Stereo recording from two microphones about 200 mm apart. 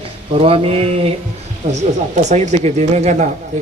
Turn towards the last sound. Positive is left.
turn(degrees=-35)  # may be behind; listen again after turning